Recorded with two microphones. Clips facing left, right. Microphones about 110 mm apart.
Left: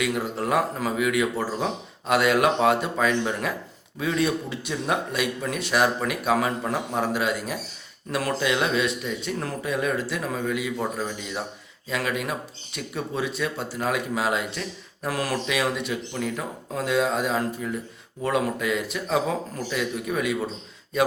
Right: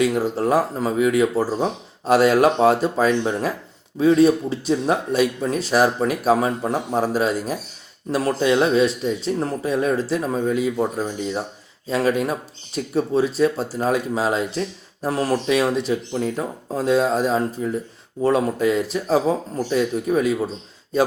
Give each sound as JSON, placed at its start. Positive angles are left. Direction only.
{"t": 0.0, "sound": "speech", "side_deg": -35}